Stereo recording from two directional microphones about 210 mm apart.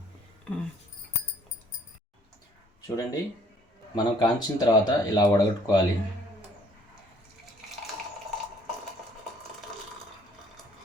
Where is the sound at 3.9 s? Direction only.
20° left (ahead or behind).